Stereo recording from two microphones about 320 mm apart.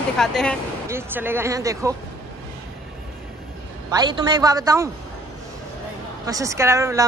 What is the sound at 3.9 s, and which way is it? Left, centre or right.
Speech, centre.